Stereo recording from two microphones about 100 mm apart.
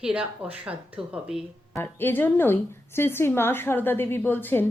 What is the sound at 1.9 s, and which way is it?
A woman's voice, 20° left (ahead or behind).